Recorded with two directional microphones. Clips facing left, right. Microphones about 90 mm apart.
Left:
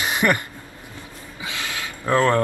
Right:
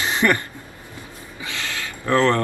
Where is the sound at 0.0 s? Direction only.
15° left (ahead or behind).